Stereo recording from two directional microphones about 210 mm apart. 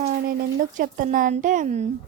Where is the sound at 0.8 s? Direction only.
40° right (ahead or behind).